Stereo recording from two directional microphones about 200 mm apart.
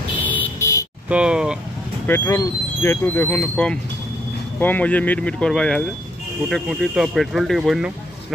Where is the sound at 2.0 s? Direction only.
15° left (ahead or behind).